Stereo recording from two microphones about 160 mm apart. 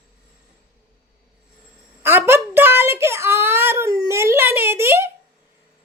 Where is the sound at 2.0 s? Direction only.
15° right (ahead or behind).